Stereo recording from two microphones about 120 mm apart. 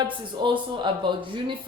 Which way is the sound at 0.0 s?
40° right (ahead or behind).